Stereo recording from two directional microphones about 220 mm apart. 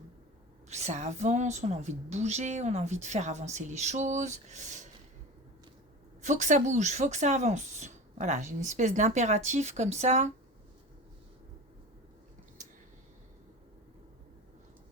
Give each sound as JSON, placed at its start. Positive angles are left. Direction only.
{"t": 0.7, "sound": "a woman's voice", "side_deg": -30}
{"t": 6.2, "sound": "a woman's voice", "side_deg": -35}